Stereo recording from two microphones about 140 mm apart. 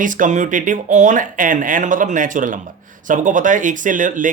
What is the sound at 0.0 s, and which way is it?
Speech, 65° right (ahead or behind).